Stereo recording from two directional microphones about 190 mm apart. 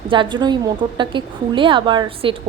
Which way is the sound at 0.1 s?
25° right (ahead or behind).